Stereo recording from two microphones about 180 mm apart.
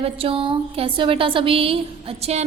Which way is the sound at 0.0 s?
30° right (ahead or behind).